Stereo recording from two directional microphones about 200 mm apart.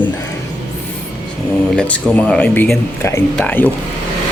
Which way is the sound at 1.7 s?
5° left (ahead or behind).